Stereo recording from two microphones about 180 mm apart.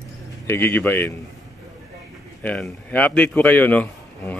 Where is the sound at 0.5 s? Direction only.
10° left (ahead or behind).